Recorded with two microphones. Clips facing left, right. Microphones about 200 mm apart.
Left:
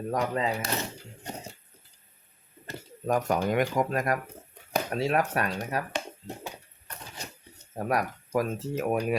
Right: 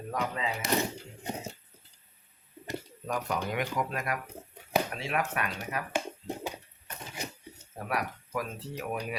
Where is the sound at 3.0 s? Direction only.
45° left (ahead or behind).